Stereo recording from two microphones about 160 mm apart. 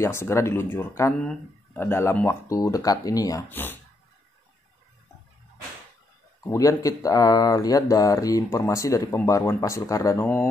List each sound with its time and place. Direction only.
0.0 s speech: 15° left (ahead or behind)
6.4 s speech: 20° left (ahead or behind)